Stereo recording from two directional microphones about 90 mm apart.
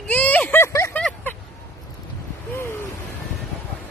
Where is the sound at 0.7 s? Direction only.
35° left (ahead or behind).